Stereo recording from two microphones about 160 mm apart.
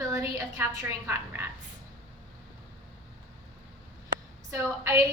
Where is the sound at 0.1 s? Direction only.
20° right (ahead or behind).